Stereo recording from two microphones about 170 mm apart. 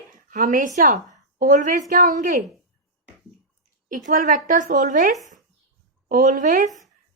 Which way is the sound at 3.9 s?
50° right (ahead or behind).